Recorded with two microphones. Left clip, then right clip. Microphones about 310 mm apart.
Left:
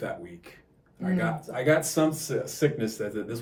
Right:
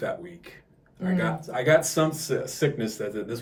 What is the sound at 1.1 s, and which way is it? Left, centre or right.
Speech, centre.